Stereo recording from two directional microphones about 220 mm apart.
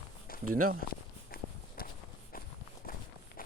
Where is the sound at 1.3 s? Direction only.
40° left (ahead or behind).